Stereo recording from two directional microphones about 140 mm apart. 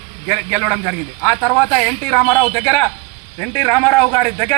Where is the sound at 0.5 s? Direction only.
10° left (ahead or behind).